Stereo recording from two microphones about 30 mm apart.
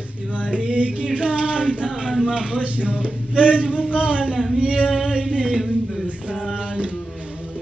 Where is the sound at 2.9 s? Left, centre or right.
Right.